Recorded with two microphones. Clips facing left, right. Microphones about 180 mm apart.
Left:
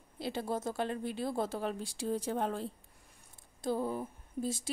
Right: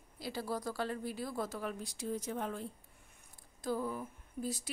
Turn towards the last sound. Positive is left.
turn(degrees=25)  # may be behind; listen again after turning